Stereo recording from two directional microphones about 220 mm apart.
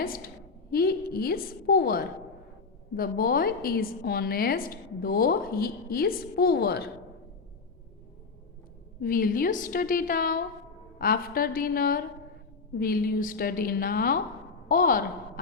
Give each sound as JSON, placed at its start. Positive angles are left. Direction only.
{"t": 0.0, "sound": "a sound", "side_deg": 40}
{"t": 0.7, "sound": "a woman's voice", "side_deg": 45}
{"t": 9.0, "sound": "a woman's voice", "side_deg": 40}